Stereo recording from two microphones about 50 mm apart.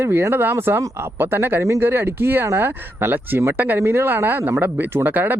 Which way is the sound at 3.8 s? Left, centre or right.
Right.